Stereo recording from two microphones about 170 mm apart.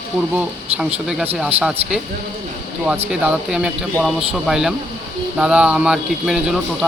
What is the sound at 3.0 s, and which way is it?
Speech, 5° right (ahead or behind).